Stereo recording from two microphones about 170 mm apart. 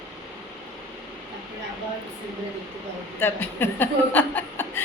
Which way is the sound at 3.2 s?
10° left (ahead or behind).